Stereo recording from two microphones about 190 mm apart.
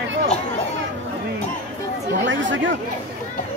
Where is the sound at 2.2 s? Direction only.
80° right.